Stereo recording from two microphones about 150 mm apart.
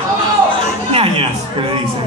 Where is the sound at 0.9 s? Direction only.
40° right (ahead or behind).